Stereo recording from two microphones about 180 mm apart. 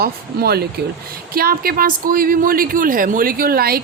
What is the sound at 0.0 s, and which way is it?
A woman's voice, 60° right (ahead or behind).